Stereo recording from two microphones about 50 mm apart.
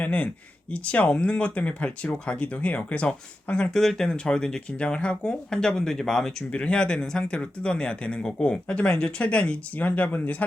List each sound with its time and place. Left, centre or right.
0.0 s speech: left; by 6.3 s centre
6.5 s speech: left